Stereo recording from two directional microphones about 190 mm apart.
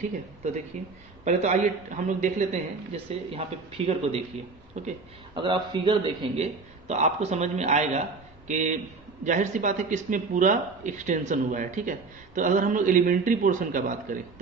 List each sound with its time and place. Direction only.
0.7 s a man's voice: 40° right (ahead or behind)
5.3 s a man's voice: 25° right (ahead or behind); by 13.9 s 45° right (ahead or behind)